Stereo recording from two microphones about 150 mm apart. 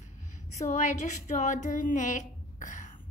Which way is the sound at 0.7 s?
55° left (ahead or behind).